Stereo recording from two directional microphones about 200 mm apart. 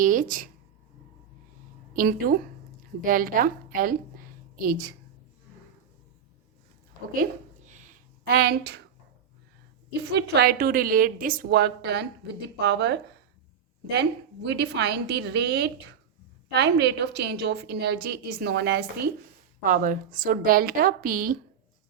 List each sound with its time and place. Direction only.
0.0 s speech: 40° right (ahead or behind)
1.9 s a woman's voice: 45° right (ahead or behind)
7.7 s a sound: 40° right (ahead or behind)
10.1 s a woman's voice: 55° right (ahead or behind)
14.5 s a woman's voice: 55° right (ahead or behind)